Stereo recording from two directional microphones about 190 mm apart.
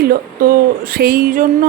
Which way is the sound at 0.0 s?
50° right (ahead or behind).